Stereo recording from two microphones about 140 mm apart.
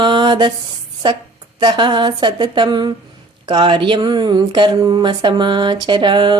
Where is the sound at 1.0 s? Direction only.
35° right (ahead or behind).